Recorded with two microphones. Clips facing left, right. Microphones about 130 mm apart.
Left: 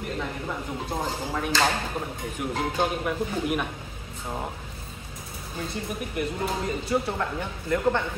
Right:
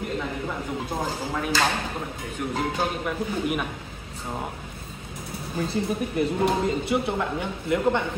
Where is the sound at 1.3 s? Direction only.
Centre (ahead or behind).